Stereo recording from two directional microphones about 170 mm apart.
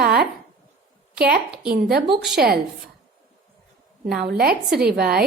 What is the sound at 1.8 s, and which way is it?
Speech, 70° right (ahead or behind).